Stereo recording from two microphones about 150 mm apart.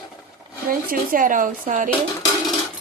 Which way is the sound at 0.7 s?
70° right (ahead or behind).